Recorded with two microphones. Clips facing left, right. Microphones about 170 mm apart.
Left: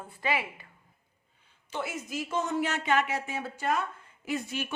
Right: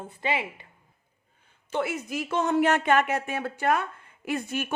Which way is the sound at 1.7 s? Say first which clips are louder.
Right 6 dB; 60° right (ahead or behind).